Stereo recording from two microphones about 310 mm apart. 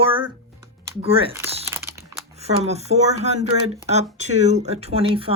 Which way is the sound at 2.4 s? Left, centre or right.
Right.